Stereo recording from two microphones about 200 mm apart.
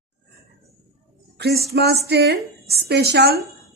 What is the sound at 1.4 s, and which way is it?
A woman's voice, 55° right (ahead or behind).